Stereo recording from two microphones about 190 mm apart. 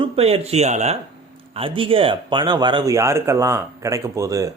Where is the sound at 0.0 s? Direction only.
30° right (ahead or behind).